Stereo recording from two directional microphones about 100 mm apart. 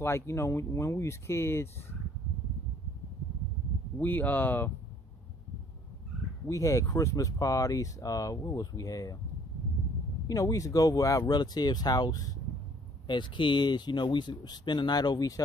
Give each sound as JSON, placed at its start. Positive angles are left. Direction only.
{"t": 0.0, "sound": "speech", "side_deg": 25}
{"t": 4.0, "sound": "speech", "side_deg": 20}
{"t": 6.4, "sound": "speech", "side_deg": 30}
{"t": 10.2, "sound": "speech", "side_deg": 35}
{"t": 13.0, "sound": "speech", "side_deg": 55}